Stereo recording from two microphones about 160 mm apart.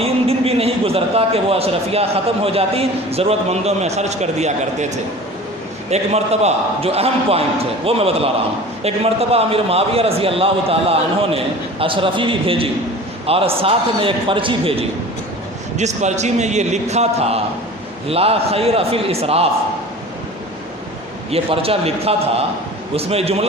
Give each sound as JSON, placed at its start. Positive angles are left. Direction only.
{"t": 0.0, "sound": "a man's voice", "side_deg": -40}
{"t": 5.9, "sound": "a man's voice", "side_deg": -40}
{"t": 15.8, "sound": "a man's voice", "side_deg": -45}
{"t": 21.2, "sound": "a man's voice", "side_deg": -35}